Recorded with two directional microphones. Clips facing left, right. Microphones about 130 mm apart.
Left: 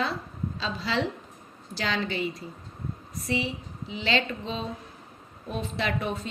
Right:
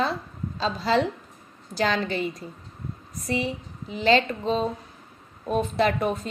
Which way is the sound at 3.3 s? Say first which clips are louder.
Right 2 dB; 45° right (ahead or behind).